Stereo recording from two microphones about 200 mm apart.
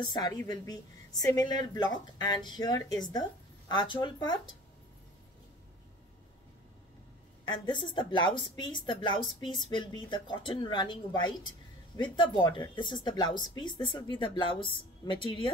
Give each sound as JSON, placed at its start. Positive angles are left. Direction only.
{"t": 0.0, "sound": "a woman's voice", "side_deg": 20}
{"t": 7.4, "sound": "a woman's voice", "side_deg": 20}